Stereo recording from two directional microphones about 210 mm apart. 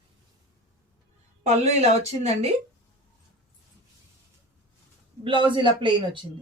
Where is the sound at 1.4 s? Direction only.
30° right (ahead or behind).